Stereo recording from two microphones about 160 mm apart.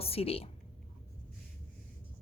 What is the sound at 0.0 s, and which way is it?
Speech, 40° left (ahead or behind).